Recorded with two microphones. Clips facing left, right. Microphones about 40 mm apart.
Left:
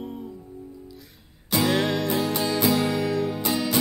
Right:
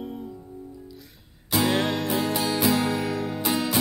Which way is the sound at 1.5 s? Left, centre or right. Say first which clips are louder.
Left 1 dB; centre.